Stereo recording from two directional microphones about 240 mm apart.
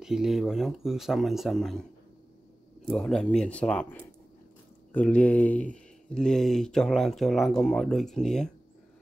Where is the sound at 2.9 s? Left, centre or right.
Centre.